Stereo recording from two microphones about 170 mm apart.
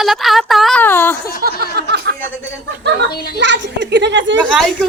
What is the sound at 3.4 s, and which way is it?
Speech, 90° right.